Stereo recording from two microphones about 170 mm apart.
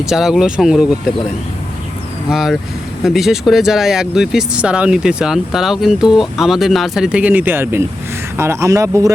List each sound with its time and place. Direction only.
0.0 s speech: 5° right (ahead or behind)
2.3 s speech: centre (ahead or behind); by 9.1 s 20° right (ahead or behind)